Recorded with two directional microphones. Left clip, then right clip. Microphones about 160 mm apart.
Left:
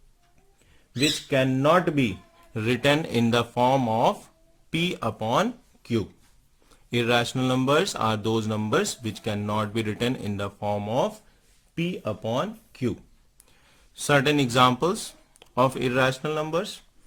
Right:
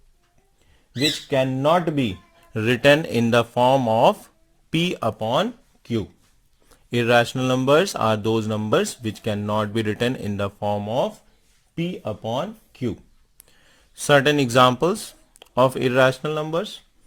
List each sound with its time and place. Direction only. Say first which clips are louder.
0.9 s speech: right 2 dB; 35° right (ahead or behind)